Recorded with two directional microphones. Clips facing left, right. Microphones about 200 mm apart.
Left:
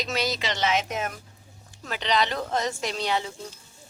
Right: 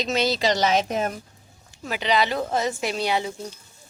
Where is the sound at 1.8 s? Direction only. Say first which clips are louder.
Right 3 dB; 10° right (ahead or behind).